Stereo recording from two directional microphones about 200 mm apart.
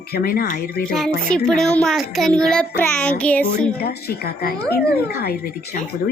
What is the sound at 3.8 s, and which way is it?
A woman's voice, 50° left (ahead or behind).